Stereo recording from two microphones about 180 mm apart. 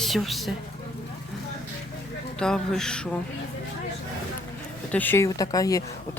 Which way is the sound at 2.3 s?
5° left (ahead or behind).